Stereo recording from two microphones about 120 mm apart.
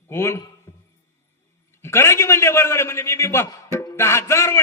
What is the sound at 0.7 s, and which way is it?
Music, 30° left (ahead or behind).